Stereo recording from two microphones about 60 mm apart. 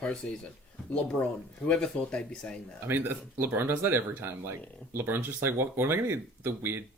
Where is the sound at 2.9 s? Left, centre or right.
Right.